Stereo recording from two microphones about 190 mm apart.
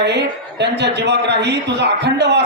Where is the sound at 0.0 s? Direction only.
60° right (ahead or behind).